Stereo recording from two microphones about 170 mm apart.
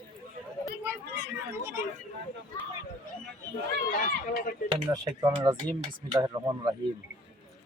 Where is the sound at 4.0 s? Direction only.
50° left (ahead or behind).